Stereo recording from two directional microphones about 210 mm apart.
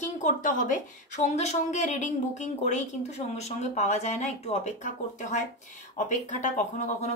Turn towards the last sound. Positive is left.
turn(degrees=35)  # may be behind; listen again after turning